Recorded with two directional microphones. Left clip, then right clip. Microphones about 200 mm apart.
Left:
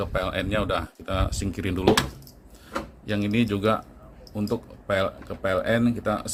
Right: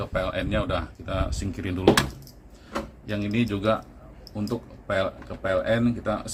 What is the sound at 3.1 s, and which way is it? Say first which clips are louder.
Speech: left 3 dB; 50° left (ahead or behind).